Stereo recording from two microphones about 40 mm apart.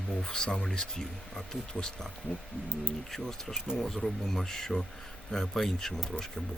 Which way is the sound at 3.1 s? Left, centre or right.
Centre.